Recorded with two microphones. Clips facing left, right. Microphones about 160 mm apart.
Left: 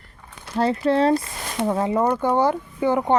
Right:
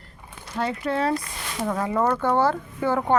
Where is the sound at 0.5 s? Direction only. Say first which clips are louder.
Left 6 dB; 35° left (ahead or behind).